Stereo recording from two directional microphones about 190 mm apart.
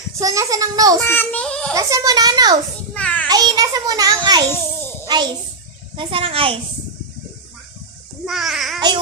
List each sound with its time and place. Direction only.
0.2 s a child's voice: 20° right (ahead or behind)
1.0 s child singing: 10° left (ahead or behind)
1.7 s a child's voice: 20° right (ahead or behind)
2.9 s child singing: 5° left (ahead or behind)
3.2 s children playing: 20° right (ahead or behind)
5.1 s a child's voice: 20° right (ahead or behind)
8.3 s a child's voice: centre (ahead or behind)